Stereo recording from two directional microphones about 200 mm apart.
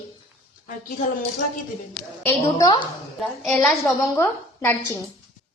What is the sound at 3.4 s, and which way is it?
A woman's voice, 5° left (ahead or behind).